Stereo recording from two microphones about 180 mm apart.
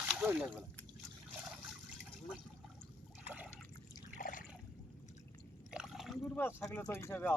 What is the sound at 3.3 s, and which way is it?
Liquid, 10° right (ahead or behind).